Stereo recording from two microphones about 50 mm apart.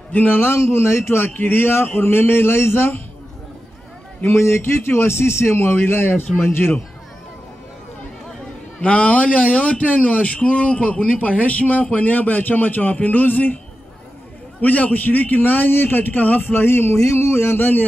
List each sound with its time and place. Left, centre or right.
0.1 s speech: left
0.4 s a man's voice: left
1.1 s speech: left
1.7 s a man's voice: left
4.2 s a man's voice: left
8.8 s a man's voice: left
14.6 s a man's voice: left